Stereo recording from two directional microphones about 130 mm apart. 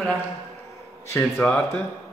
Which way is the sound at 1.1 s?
15° left (ahead or behind).